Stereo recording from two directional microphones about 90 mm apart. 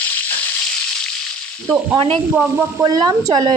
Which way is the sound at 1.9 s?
90° right.